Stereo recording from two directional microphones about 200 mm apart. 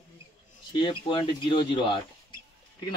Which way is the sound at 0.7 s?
25° left (ahead or behind).